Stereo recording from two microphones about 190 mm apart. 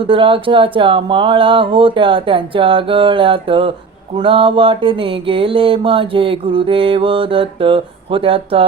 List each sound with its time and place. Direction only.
0.1 s mantra: 25° right (ahead or behind)